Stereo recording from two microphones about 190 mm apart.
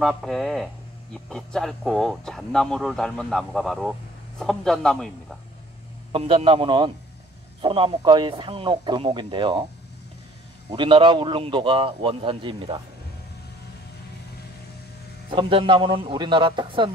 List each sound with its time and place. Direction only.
0.0 s speech: centre (ahead or behind)
6.1 s a man's voice: 30° right (ahead or behind)
10.7 s a man's voice: 25° right (ahead or behind)
15.2 s a man's voice: 25° right (ahead or behind)